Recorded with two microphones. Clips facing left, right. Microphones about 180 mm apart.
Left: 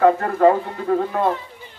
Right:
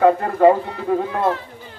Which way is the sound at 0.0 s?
5° right (ahead or behind).